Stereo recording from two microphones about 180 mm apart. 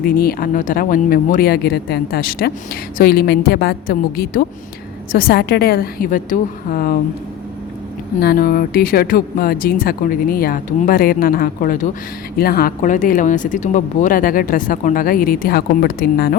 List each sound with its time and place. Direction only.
0.0 s speech: 55° left (ahead or behind)
8.2 s speech: 55° left (ahead or behind)